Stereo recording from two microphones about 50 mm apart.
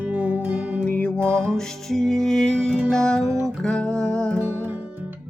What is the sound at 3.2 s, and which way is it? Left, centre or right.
Music, right.